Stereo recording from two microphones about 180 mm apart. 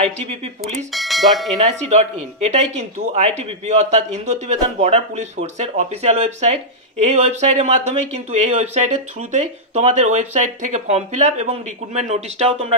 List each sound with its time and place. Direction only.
0.0 s speech: 35° right (ahead or behind)
0.9 s speech: centre (ahead or behind)
1.9 s speech: 40° right (ahead or behind)